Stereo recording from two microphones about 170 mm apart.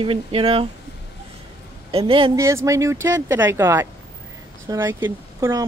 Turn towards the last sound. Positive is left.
turn(degrees=-15)  # may be behind; listen again after turning